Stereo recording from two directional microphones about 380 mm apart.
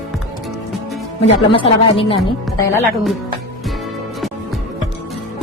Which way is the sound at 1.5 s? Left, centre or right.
Centre.